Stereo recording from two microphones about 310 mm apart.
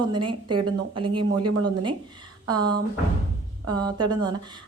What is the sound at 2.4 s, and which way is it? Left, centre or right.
Speech, centre.